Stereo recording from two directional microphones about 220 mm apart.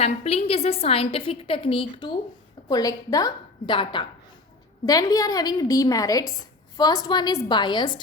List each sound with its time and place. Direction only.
0.0 s a woman's voice: 25° left (ahead or behind)